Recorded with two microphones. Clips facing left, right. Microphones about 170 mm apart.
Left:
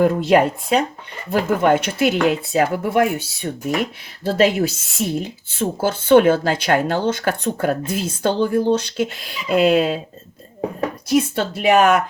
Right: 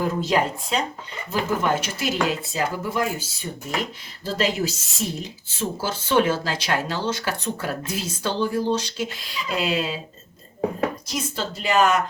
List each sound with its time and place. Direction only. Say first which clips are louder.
0.0 s speech: left 7 dB; 60° left (ahead or behind)
11.1 s speech: left 10 dB; 60° left (ahead or behind)